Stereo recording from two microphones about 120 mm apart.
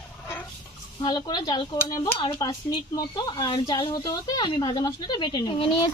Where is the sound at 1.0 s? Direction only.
40° left (ahead or behind).